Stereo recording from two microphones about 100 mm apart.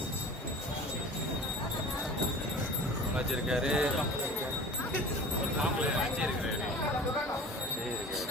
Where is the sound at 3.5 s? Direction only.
5° right (ahead or behind).